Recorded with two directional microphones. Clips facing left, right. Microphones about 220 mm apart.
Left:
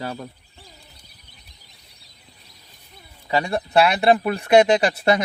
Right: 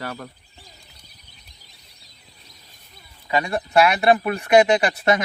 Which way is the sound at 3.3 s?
30° left (ahead or behind).